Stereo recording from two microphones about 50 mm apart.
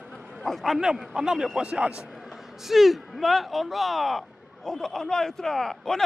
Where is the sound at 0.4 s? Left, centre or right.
Centre.